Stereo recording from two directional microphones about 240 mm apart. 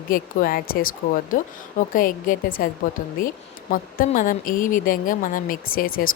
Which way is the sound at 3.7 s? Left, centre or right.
Left.